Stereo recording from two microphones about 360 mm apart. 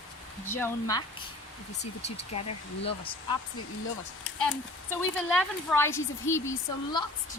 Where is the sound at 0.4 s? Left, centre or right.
Centre.